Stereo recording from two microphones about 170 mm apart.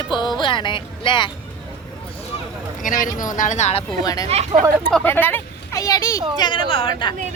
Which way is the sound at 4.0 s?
20° left (ahead or behind).